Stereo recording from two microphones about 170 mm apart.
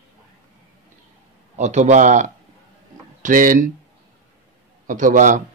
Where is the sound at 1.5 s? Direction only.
45° right (ahead or behind).